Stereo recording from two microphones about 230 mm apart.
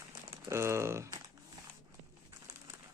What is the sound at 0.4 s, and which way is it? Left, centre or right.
Speech, centre.